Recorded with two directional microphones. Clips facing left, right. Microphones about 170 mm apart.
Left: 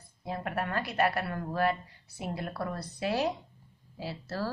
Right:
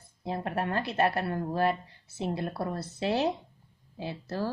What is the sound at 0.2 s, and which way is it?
A woman's voice, 30° right (ahead or behind).